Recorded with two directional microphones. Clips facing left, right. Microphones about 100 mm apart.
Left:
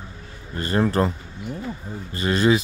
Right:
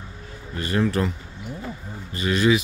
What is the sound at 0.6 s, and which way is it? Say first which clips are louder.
Speech: left 2 dB; 35° left (ahead or behind).